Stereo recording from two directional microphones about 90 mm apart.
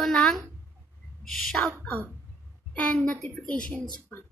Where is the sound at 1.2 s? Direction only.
5° left (ahead or behind).